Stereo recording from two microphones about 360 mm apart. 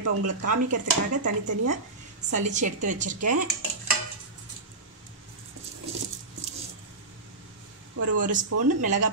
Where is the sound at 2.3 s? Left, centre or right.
Centre.